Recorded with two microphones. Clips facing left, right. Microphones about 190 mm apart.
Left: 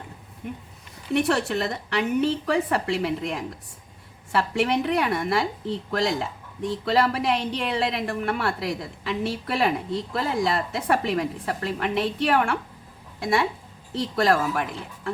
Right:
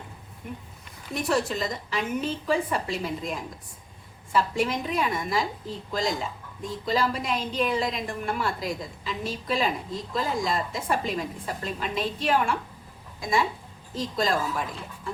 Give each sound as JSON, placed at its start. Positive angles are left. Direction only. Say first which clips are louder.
{"t": 1.1, "sound": "a woman's voice", "louder": "left 4 dB", "side_deg": 70}